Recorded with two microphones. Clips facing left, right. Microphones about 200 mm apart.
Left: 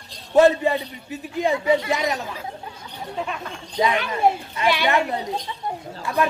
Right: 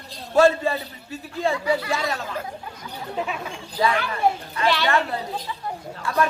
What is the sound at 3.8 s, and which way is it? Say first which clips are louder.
A man's voice: left 2 dB; 20° left (ahead or behind).